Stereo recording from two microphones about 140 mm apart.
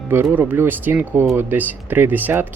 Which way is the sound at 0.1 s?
15° right (ahead or behind).